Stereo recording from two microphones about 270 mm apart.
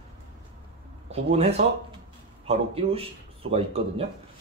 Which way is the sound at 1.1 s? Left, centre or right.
Right.